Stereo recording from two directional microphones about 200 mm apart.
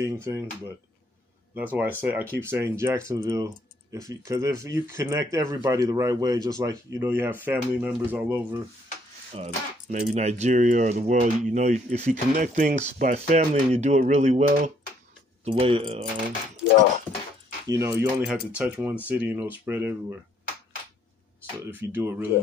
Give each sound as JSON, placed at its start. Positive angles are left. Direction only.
{"t": 0.0, "sound": "speech", "side_deg": -15}
{"t": 1.5, "sound": "speech", "side_deg": -10}
{"t": 9.3, "sound": "speech", "side_deg": -35}
{"t": 17.6, "sound": "speech", "side_deg": -15}
{"t": 21.6, "sound": "speech", "side_deg": -10}